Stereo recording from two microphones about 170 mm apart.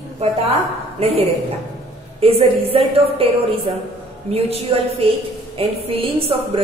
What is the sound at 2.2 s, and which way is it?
A woman's voice, 35° right (ahead or behind).